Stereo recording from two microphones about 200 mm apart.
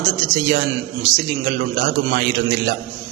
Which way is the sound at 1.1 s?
55° right (ahead or behind).